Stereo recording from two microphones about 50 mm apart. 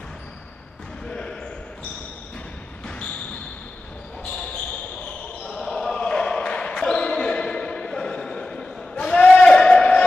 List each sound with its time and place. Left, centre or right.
1.0 s basketball bounce: centre
5.5 s basketball bounce: centre
8.9 s a sound: centre